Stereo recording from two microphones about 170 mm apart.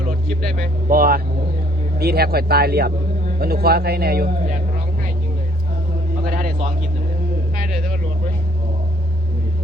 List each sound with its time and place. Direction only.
0.9 s a man's voice: 55° right (ahead or behind)
6.2 s vehicle: 55° right (ahead or behind)
7.6 s a sound: 55° right (ahead or behind)